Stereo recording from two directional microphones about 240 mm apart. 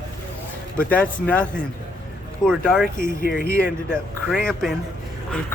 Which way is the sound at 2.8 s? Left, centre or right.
Left.